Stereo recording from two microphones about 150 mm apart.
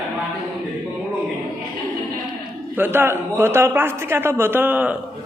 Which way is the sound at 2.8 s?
15° right (ahead or behind).